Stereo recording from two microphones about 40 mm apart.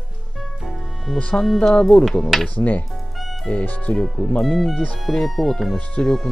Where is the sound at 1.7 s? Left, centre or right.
Left.